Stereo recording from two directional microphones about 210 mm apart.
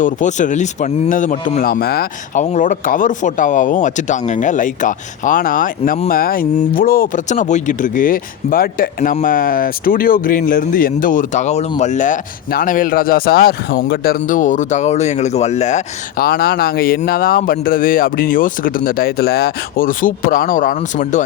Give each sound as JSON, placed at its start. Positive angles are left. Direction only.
{"t": 0.0, "sound": "speech", "side_deg": 35}
{"t": 2.4, "sound": "speech", "side_deg": 35}